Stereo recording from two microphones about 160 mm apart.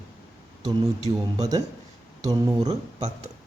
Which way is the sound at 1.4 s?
25° right (ahead or behind).